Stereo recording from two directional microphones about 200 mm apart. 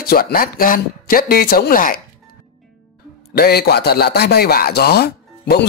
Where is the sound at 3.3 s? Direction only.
50° left (ahead or behind).